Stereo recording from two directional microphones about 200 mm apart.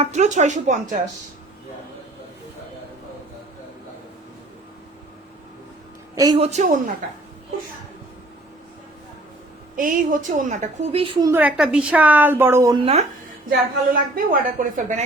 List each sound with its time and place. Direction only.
0.0 s a woman's voice: 35° right (ahead or behind)
6.1 s a woman's voice: 20° right (ahead or behind)
6.4 s a woman's voice: 35° right (ahead or behind)
9.7 s a woman's voice: 45° right (ahead or behind); by 11.3 s 25° right (ahead or behind)
11.3 s a woman's voice: 10° right (ahead or behind)
12.8 s speech: 30° right (ahead or behind)
13.9 s a woman's voice: 45° right (ahead or behind)